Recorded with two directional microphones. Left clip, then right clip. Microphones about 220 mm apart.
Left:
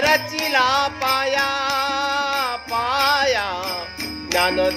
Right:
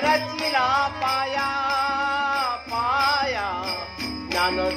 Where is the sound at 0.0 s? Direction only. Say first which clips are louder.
Left 3 dB; 50° left (ahead or behind).